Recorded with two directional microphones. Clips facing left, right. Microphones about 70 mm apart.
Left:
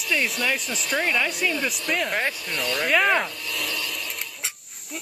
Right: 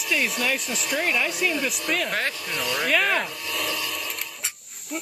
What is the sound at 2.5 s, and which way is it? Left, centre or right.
Speech, centre.